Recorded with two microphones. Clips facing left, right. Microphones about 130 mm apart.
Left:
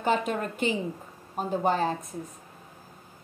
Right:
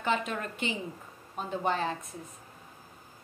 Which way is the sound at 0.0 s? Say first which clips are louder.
Left 4 dB; 40° left (ahead or behind).